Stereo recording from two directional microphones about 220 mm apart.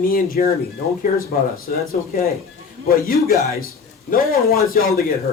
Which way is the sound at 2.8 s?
40° left (ahead or behind).